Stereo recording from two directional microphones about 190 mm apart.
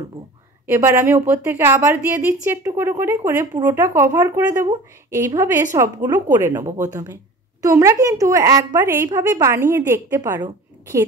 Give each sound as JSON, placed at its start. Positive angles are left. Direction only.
{"t": 0.7, "sound": "speech", "side_deg": -10}